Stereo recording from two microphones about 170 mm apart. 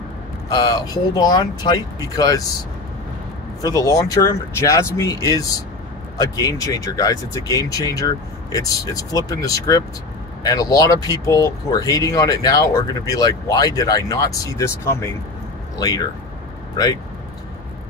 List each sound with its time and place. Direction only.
0.5 s speech: 20° left (ahead or behind)
3.6 s speech: 20° left (ahead or behind)